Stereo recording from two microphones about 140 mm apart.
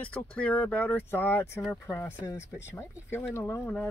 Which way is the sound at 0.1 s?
10° left (ahead or behind).